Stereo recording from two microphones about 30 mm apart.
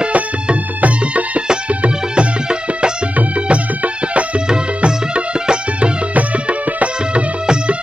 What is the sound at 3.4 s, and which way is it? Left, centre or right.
Music, right.